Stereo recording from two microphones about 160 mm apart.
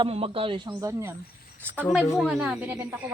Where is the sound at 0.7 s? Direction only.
20° right (ahead or behind).